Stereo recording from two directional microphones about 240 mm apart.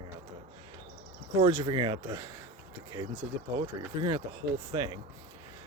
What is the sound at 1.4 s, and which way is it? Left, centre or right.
Speech, centre.